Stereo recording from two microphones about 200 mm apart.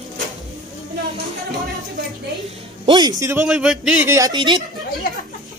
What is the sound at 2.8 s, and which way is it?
Speech, 20° right (ahead or behind).